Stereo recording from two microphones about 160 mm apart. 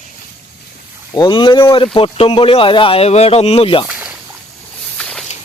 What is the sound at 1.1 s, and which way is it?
Speech, 30° left (ahead or behind).